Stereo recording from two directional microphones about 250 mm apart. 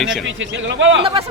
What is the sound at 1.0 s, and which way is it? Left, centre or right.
Speech, right.